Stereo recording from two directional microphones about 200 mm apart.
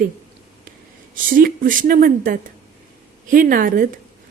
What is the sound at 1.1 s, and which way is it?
A woman's voice, 45° right (ahead or behind).